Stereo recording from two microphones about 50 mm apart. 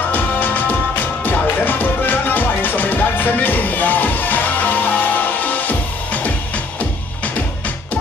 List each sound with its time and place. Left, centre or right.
0.1 s music: left